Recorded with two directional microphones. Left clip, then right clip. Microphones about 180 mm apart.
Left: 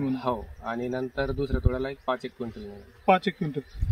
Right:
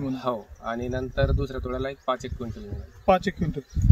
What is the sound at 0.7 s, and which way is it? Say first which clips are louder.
Speech: right 1 dB; 30° right (ahead or behind).